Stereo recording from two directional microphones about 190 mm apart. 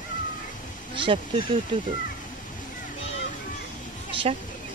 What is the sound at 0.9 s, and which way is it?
Speech, 25° right (ahead or behind).